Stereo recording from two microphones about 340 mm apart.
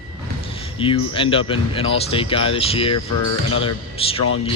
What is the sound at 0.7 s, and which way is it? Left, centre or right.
Speech, centre.